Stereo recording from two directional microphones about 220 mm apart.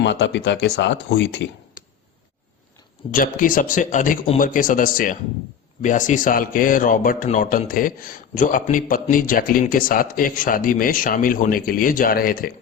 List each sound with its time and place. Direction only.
0.0 s speech: 55° left (ahead or behind)
3.1 s speech: 40° left (ahead or behind)